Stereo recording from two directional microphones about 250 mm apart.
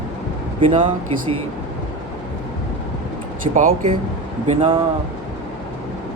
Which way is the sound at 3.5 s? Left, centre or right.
Right.